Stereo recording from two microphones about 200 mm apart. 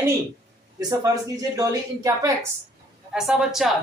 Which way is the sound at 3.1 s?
Centre (ahead or behind).